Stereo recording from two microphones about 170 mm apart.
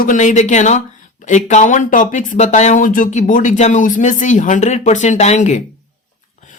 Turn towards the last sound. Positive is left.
turn(degrees=45)  # may be behind; listen again after turning